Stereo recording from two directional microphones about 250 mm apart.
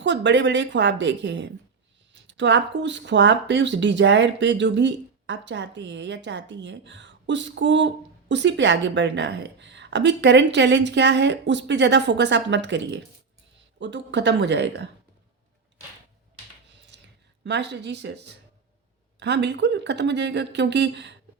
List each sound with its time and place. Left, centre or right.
0.0 s speech: right
17.4 s speech: right